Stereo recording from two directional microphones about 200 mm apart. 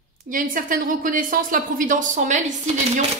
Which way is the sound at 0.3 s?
40° right (ahead or behind).